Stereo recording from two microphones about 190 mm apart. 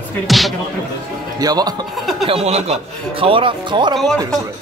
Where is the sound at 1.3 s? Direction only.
20° right (ahead or behind).